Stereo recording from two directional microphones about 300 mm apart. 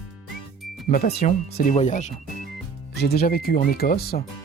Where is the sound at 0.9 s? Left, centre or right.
Left.